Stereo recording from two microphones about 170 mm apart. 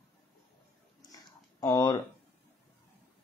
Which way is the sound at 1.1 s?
20° left (ahead or behind).